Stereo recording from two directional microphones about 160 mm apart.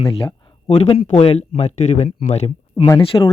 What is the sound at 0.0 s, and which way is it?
Speech, 35° left (ahead or behind).